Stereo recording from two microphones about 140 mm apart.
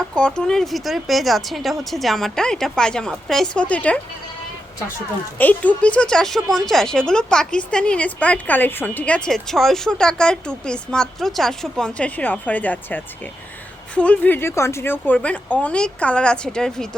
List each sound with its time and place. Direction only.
0.1 s speech: 5° left (ahead or behind)
5.4 s speech: 10° left (ahead or behind)